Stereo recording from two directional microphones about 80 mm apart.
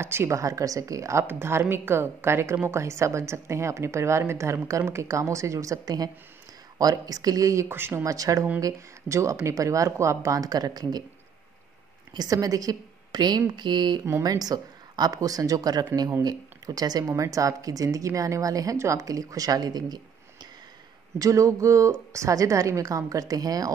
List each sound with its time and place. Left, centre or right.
0.0 s a woman's voice: right
1.2 s a woman's voice: right
7.6 s speech: right
8.0 s a woman's voice: right
12.1 s a woman's voice: right
14.2 s a woman's voice: right
21.2 s a woman's voice: right